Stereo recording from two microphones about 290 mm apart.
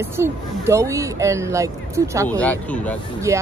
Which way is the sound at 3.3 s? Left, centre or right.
Centre.